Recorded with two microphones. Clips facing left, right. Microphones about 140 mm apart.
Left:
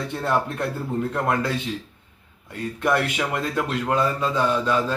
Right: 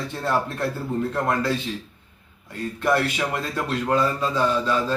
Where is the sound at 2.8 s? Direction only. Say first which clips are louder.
Even; 10° left (ahead or behind).